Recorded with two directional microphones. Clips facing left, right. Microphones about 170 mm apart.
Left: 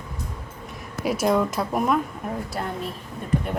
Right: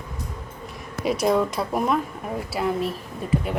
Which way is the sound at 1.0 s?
Centre (ahead or behind).